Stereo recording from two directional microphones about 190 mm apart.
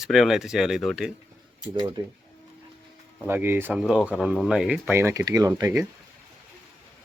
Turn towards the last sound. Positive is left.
turn(degrees=-15)  # may be behind; listen again after turning